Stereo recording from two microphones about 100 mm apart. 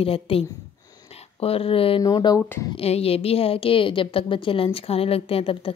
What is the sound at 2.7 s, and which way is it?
A woman's voice, 85° left.